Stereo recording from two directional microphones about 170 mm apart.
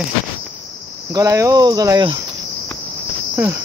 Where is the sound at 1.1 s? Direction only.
20° right (ahead or behind).